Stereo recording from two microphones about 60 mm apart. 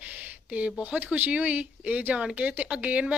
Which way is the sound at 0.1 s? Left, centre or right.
Right.